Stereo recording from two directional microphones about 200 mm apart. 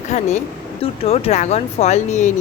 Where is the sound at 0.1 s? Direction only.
35° left (ahead or behind).